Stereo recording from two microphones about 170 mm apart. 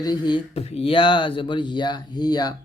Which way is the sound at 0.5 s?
40° left (ahead or behind).